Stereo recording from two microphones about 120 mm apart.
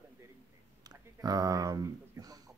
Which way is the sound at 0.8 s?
30° right (ahead or behind).